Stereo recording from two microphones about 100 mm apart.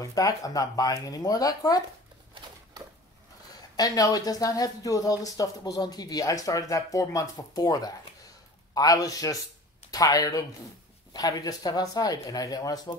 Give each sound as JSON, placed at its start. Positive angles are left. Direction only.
{"t": 0.0, "sound": "speech", "side_deg": 35}
{"t": 2.4, "sound": "a sound", "side_deg": -55}
{"t": 3.7, "sound": "speech", "side_deg": 40}